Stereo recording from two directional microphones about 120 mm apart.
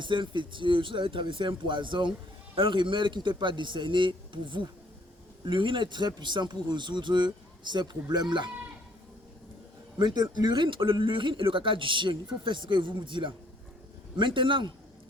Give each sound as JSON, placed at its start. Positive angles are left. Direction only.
{"t": 0.0, "sound": "a man's voice", "side_deg": -40}
{"t": 10.0, "sound": "a man's voice", "side_deg": -35}